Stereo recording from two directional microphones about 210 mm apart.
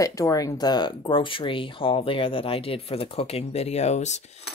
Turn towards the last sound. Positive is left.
turn(degrees=35)  # may be behind; listen again after turning